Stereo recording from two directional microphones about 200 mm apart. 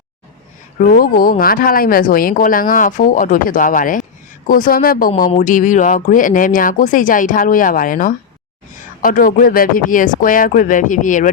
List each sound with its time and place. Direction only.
0.8 s speech: 45° left (ahead or behind)